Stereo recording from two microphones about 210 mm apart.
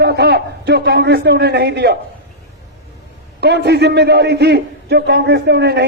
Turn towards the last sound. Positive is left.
turn(degrees=-55)  # may be behind; listen again after turning